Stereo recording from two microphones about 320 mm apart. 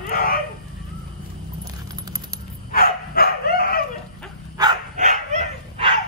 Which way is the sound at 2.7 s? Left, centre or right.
Left.